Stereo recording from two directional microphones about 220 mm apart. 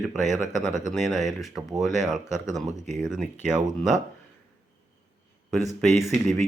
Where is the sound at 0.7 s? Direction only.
35° right (ahead or behind).